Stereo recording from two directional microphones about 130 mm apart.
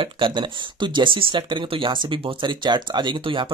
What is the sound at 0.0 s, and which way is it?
Speech, 40° right (ahead or behind).